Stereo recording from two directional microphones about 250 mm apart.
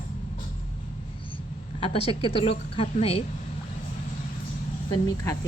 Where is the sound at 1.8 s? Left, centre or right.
Left.